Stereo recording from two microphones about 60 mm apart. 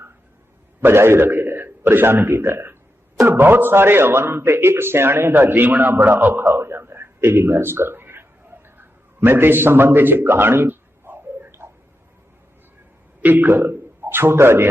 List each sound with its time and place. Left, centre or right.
0.8 s a man's voice: right
6.4 s a sound: right
13.2 s a man's voice: right